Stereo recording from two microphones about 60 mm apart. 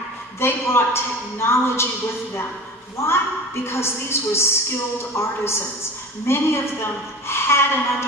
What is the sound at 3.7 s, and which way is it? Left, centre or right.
A woman's voice, left.